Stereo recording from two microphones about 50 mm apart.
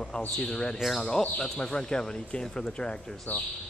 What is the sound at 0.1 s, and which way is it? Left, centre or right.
A man's voice, left.